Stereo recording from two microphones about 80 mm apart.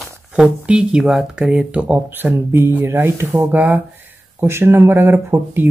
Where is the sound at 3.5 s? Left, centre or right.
Right.